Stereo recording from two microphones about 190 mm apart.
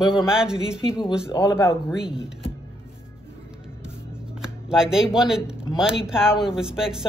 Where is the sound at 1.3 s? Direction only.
15° left (ahead or behind).